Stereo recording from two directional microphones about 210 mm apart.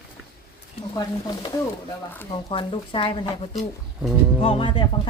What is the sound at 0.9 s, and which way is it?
Speech, 20° left (ahead or behind).